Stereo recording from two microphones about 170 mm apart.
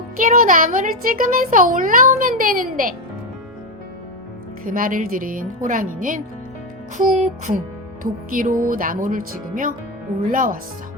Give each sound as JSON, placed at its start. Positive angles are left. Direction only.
{"t": 0.2, "sound": "speech", "side_deg": -50}
{"t": 4.6, "sound": "speech", "side_deg": -55}